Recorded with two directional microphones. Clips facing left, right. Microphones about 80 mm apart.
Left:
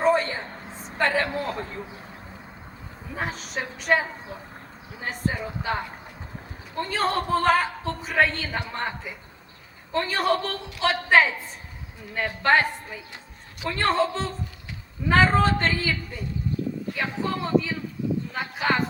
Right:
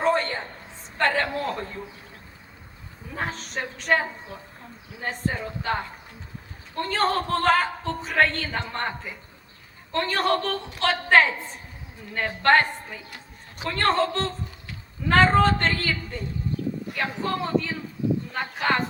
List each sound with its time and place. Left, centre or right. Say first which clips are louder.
0.0 s a sound: left 1 dB; centre
0.9 s a woman's voice: even; centre
3.2 s a woman's voice: even; centre
5.0 s a man's voice: even; centre